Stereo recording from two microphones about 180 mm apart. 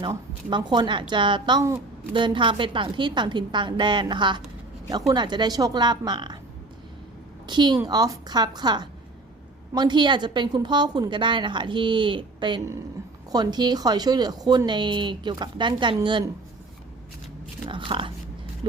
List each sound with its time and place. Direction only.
0.0 s a woman's voice: 25° right (ahead or behind)
7.4 s a woman's voice: 25° right (ahead or behind)
17.7 s a sound: 30° right (ahead or behind)